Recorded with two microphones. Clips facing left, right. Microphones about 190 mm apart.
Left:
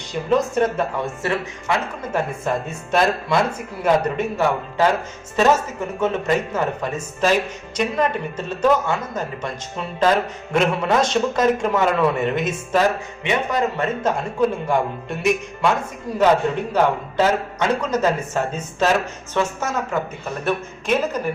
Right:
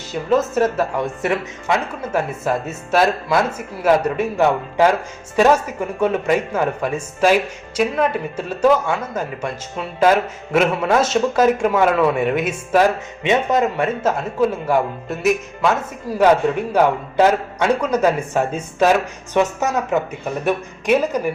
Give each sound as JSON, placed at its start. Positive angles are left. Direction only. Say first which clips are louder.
{"t": 0.1, "sound": "a man's voice", "louder": "right 2 dB", "side_deg": -5}
{"t": 13.2, "sound": "speech", "louder": "right 4 dB", "side_deg": -20}
{"t": 13.8, "sound": "a man's voice", "louder": "right 2 dB", "side_deg": -5}